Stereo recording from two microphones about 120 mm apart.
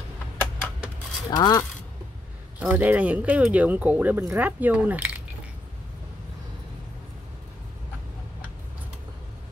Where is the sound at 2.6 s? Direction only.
10° right (ahead or behind).